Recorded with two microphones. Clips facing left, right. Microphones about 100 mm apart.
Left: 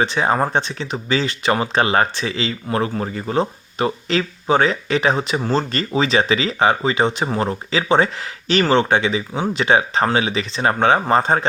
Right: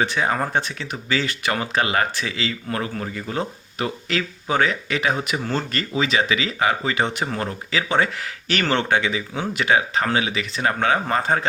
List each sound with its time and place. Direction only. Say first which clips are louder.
0.0 s speech: left 4 dB; 25° left (ahead or behind)